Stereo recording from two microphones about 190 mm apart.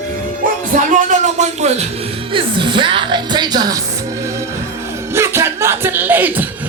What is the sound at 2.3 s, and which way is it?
Speech, 25° right (ahead or behind).